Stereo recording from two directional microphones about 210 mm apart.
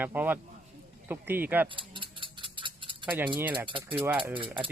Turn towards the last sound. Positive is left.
turn(degrees=-25)  # may be behind; listen again after turning